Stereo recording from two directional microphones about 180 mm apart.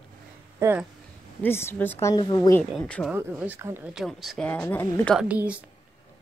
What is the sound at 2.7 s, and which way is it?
Speech, 5° left (ahead or behind).